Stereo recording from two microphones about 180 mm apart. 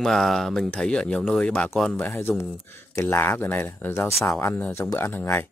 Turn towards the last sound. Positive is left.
turn(degrees=10)  # may be behind; listen again after turning